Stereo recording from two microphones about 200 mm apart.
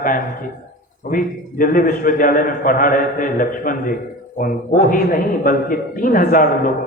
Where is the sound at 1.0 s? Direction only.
40° left (ahead or behind).